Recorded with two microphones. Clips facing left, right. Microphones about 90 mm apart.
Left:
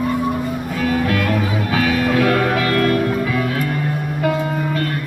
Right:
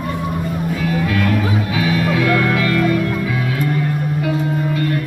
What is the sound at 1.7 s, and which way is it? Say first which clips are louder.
Music: left 3 dB; 50° left (ahead or behind).